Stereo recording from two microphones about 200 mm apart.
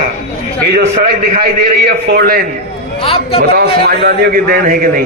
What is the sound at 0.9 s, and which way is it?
A man's voice, 45° right (ahead or behind).